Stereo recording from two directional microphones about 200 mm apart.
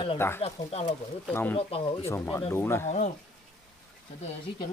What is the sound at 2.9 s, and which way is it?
Speech, 35° left (ahead or behind).